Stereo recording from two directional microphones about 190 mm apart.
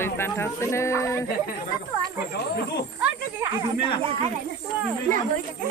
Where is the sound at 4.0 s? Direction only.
30° right (ahead or behind).